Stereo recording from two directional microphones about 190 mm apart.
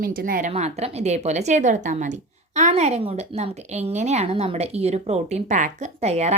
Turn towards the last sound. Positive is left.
turn(degrees=-35)  # may be behind; listen again after turning